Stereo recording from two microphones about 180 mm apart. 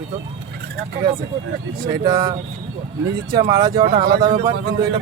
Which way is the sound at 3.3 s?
25° right (ahead or behind).